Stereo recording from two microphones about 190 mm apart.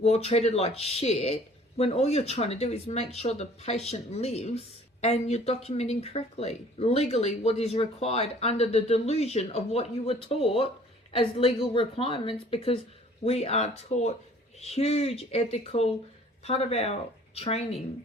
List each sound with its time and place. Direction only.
0.0 s speech: 35° left (ahead or behind)